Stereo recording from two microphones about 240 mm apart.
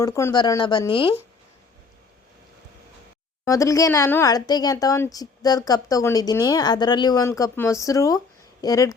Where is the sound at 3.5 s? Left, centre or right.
Centre.